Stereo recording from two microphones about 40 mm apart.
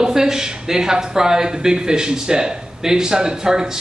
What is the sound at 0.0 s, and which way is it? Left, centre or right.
Speech, centre.